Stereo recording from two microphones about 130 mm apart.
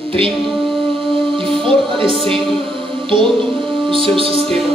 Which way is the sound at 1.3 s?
40° right (ahead or behind).